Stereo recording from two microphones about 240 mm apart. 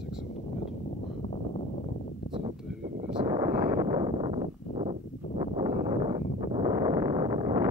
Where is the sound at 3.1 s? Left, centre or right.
Centre.